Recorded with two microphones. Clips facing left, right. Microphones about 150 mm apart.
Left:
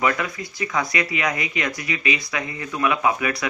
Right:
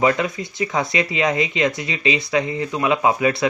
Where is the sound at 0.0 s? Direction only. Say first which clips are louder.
Right 4 dB; 25° right (ahead or behind).